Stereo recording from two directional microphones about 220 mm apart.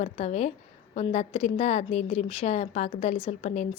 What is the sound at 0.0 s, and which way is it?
A woman's voice, 30° left (ahead or behind).